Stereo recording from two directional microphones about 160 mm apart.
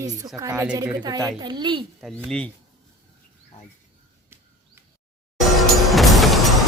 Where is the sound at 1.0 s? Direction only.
25° right (ahead or behind).